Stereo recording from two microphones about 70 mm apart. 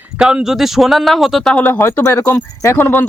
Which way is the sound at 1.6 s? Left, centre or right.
Left.